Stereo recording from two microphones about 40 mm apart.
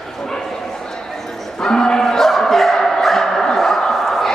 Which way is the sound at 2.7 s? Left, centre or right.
Centre.